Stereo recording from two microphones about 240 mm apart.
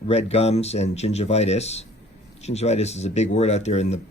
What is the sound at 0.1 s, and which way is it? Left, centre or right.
Speech, left.